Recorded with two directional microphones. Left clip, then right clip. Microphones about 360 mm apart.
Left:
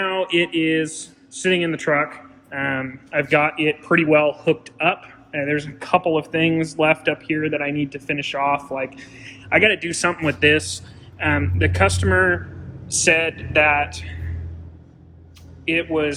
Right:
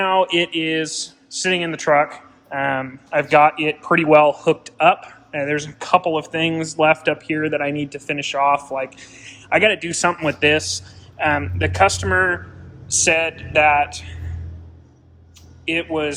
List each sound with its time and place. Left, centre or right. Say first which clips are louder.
0.0 s speech: right 3 dB; centre
15.6 s speech: left 1 dB; centre